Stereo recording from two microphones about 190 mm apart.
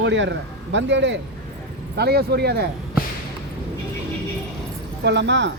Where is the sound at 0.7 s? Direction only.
70° right (ahead or behind).